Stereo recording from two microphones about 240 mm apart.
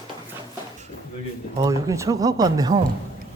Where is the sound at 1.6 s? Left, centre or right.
Centre.